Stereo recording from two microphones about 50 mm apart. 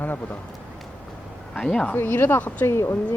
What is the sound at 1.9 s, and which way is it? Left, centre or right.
Speech, left.